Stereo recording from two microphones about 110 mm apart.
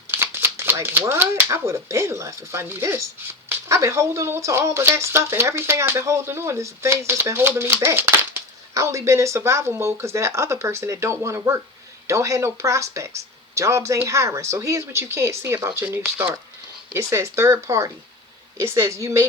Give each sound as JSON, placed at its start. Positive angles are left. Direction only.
{"t": 0.1, "sound": "speech", "side_deg": -20}
{"t": 16.0, "sound": "speech", "side_deg": -15}
{"t": 16.9, "sound": "speech", "side_deg": -25}